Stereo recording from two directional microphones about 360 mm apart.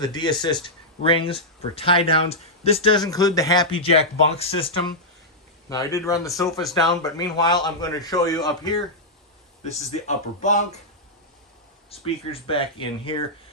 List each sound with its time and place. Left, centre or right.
0.0 s speech: centre
11.9 s speech: centre